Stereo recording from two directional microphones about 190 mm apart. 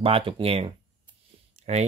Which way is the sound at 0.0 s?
30° right (ahead or behind).